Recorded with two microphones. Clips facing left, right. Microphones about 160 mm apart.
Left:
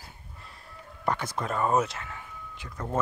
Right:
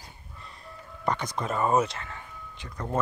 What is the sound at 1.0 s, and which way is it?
Speech, 5° left (ahead or behind).